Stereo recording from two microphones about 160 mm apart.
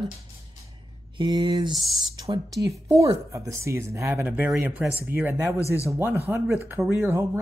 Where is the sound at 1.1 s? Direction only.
30° right (ahead or behind).